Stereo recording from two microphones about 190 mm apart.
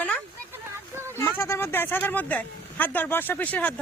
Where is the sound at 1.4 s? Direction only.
15° left (ahead or behind).